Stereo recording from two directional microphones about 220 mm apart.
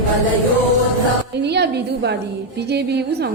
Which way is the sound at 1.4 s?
50° right (ahead or behind).